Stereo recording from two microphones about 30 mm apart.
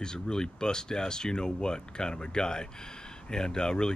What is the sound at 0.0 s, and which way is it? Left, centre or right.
Speech, left.